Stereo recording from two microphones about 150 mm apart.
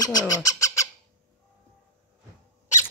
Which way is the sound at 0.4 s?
20° left (ahead or behind).